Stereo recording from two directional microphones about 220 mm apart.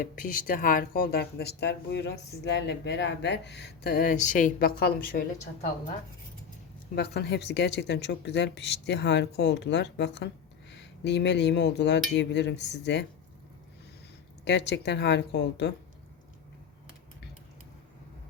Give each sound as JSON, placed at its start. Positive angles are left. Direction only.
{"t": 0.0, "sound": "speech", "side_deg": 40}
{"t": 6.9, "sound": "speech", "side_deg": 45}
{"t": 14.4, "sound": "speech", "side_deg": 50}